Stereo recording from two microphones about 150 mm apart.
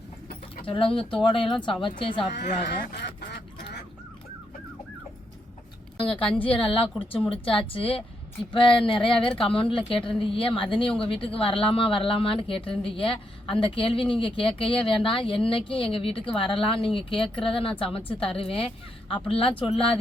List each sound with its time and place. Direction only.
0.6 s speech: 35° left (ahead or behind)
2.4 s speech: 90° left
6.1 s speech: 35° left (ahead or behind)